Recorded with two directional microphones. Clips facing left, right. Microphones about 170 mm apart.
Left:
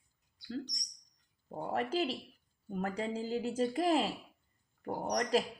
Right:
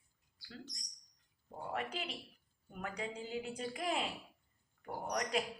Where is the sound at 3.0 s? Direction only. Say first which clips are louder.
Left 5 dB; 35° left (ahead or behind).